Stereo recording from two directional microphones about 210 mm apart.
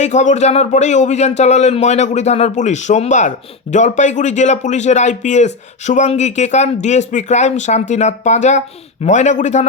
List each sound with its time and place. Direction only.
0.0 s speech: 35° left (ahead or behind)